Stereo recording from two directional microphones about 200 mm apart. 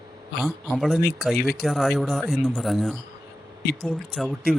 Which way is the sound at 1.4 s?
50° left (ahead or behind).